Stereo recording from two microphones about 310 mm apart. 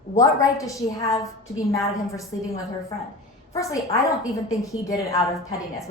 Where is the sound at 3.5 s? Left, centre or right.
Centre.